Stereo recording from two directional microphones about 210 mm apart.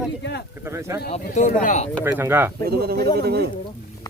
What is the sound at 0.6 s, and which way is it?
Speech, 15° right (ahead or behind).